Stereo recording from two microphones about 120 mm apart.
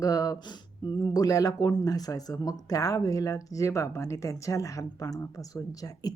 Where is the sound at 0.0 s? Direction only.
30° left (ahead or behind).